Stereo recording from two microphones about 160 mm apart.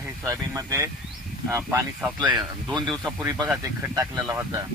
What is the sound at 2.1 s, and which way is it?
Speech, 30° right (ahead or behind).